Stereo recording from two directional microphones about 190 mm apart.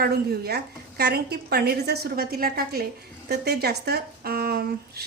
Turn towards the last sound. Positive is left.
turn(degrees=-55)  # may be behind; listen again after turning